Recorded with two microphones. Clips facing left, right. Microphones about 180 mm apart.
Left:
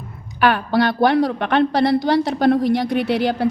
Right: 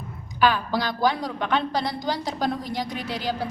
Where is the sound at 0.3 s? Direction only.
65° left (ahead or behind).